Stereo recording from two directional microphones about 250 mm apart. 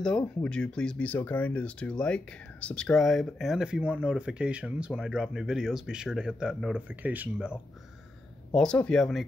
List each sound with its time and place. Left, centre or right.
0.0 s speech: centre